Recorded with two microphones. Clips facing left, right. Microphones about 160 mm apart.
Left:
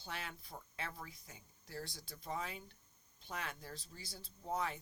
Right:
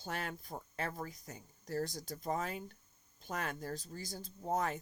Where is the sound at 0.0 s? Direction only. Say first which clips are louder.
Right 6 dB; 45° right (ahead or behind).